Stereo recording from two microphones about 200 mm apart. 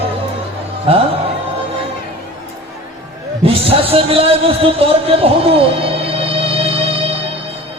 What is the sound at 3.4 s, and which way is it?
A man's voice, 30° right (ahead or behind).